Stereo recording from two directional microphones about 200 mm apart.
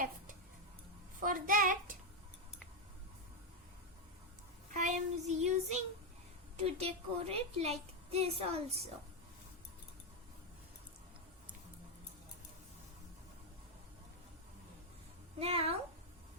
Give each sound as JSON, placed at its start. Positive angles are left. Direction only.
{"t": 1.2, "sound": "a child's voice", "side_deg": -45}
{"t": 4.7, "sound": "child singing", "side_deg": -40}
{"t": 6.6, "sound": "a woman's voice", "side_deg": -30}
{"t": 15.4, "sound": "speech", "side_deg": -30}